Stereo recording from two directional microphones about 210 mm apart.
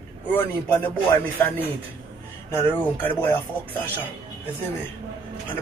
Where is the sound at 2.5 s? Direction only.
10° left (ahead or behind).